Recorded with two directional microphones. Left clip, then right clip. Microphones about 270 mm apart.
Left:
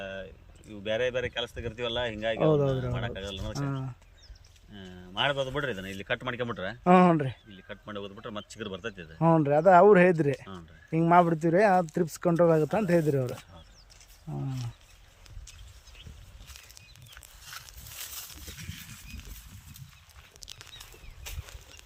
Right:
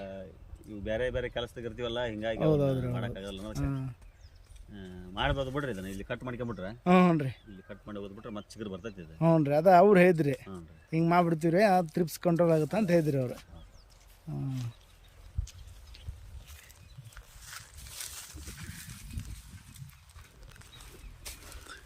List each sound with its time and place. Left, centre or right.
0.9 s a man's voice: centre
2.4 s speech: centre
2.9 s a man's voice: centre
3.6 s speech: centre
4.7 s a man's voice: centre
6.7 s speech: centre
7.7 s a man's voice: centre
9.1 s speech: centre
14.3 s speech: centre
17.4 s a sound: left